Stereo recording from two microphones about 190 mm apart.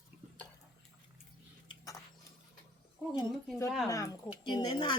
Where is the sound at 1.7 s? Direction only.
15° left (ahead or behind).